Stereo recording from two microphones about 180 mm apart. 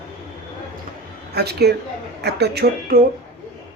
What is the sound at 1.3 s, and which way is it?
Speech, 60° right (ahead or behind).